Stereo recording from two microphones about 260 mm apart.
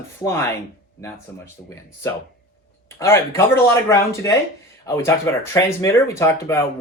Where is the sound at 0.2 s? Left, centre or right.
Centre.